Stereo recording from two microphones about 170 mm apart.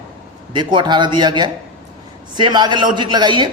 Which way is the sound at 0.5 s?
25° right (ahead or behind).